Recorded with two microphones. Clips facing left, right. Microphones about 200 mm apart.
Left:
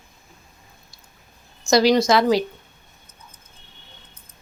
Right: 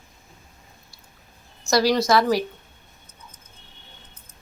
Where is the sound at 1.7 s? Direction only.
20° left (ahead or behind).